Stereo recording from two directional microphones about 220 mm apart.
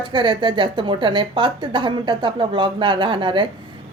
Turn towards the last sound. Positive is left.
turn(degrees=-20)  # may be behind; listen again after turning